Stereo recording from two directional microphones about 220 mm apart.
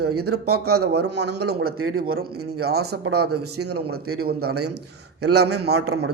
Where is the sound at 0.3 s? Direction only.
90° right.